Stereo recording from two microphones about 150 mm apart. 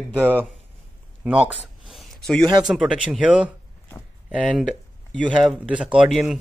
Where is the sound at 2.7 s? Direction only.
5° right (ahead or behind).